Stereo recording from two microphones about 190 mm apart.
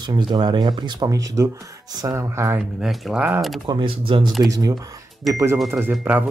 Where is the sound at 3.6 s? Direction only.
25° right (ahead or behind).